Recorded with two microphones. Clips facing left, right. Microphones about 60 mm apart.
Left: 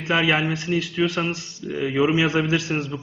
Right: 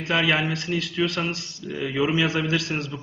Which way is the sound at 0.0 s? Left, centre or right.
Centre.